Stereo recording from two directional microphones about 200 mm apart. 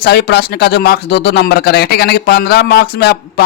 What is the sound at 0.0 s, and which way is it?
Speech, 50° left (ahead or behind).